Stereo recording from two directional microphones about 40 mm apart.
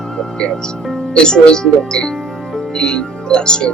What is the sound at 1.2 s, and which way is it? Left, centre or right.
Speech, centre.